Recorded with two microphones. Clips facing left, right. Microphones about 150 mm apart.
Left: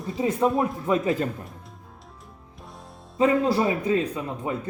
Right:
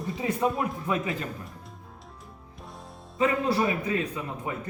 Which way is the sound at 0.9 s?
35° left (ahead or behind).